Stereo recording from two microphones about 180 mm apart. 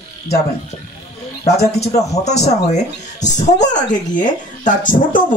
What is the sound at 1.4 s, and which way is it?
A man's voice, 35° left (ahead or behind).